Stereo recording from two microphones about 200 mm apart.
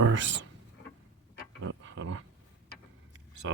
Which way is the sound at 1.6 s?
70° right (ahead or behind).